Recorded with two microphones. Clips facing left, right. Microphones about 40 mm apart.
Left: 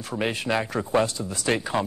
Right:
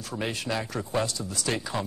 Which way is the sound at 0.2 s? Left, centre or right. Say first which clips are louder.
Left 5 dB; left.